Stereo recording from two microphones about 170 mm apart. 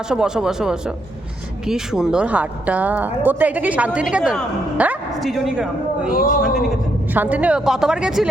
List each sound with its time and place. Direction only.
0.1 s a woman's voice: 5° right (ahead or behind)
6.1 s a man's voice: 55° left (ahead or behind)
7.1 s a woman's voice: 10° right (ahead or behind)